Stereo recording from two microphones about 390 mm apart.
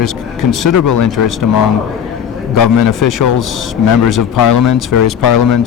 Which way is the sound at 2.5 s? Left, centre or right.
Left.